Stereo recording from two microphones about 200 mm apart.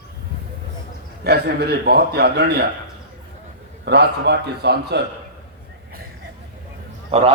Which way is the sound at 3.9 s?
55° right (ahead or behind).